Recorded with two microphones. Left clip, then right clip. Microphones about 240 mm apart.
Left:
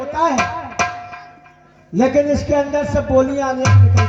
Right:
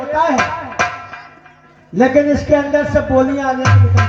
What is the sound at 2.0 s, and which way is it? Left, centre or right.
Speech, left.